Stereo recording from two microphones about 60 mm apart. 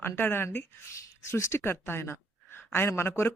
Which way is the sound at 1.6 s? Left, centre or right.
Left.